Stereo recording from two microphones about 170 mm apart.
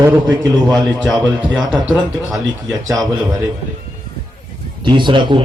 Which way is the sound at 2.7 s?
20° right (ahead or behind).